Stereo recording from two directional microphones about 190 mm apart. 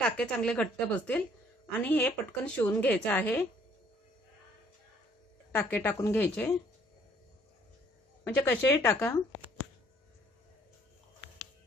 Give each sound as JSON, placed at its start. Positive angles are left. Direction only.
{"t": 0.0, "sound": "a woman's voice", "side_deg": 5}
{"t": 5.5, "sound": "a woman's voice", "side_deg": 10}
{"t": 8.2, "sound": "a woman's voice", "side_deg": 10}